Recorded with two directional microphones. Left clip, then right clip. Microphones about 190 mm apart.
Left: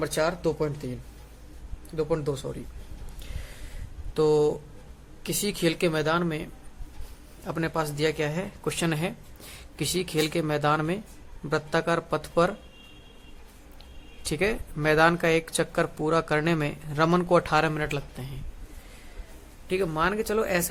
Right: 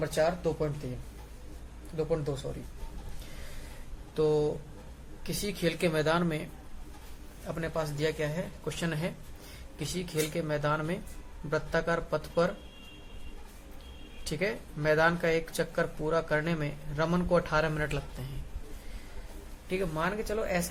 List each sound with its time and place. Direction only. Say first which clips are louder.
0.0 s speech: left 2 dB; 40° left (ahead or behind)
2.0 s speech: left 4 dB; 45° left (ahead or behind)
4.1 s speech: left 5 dB; 45° left (ahead or behind); by 6.5 s 25° left (ahead or behind)
7.4 s speech: left 5 dB; 45° left (ahead or behind)
14.3 s speech: left 6 dB; 40° left (ahead or behind)
19.6 s speech: left 6 dB; 40° left (ahead or behind)